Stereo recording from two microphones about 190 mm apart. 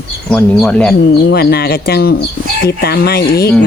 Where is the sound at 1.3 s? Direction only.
55° left (ahead or behind).